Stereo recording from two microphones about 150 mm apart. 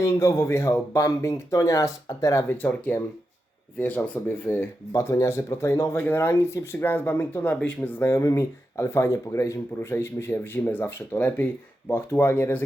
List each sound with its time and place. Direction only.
0.0 s speech: 20° left (ahead or behind)